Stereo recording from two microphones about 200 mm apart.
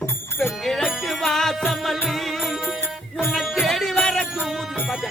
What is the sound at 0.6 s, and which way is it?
Music, centre (ahead or behind).